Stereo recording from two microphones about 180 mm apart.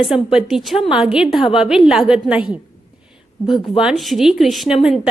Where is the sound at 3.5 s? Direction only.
Centre (ahead or behind).